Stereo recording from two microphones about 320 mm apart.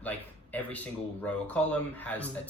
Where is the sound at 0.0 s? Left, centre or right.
Centre.